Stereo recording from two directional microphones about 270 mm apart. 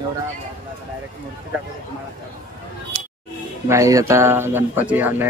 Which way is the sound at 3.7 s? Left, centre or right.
Centre.